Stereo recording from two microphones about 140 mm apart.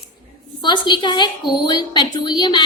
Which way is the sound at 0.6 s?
35° left (ahead or behind).